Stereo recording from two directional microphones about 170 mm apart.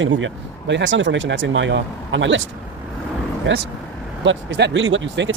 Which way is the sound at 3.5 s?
90° right.